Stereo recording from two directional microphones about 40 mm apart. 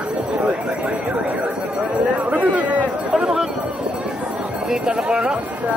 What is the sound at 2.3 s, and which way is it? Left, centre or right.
Speech, right.